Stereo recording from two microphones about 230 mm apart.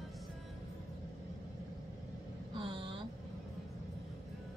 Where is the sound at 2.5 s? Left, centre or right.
Right.